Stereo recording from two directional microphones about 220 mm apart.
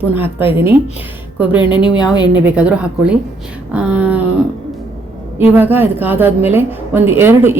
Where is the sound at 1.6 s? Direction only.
20° left (ahead or behind).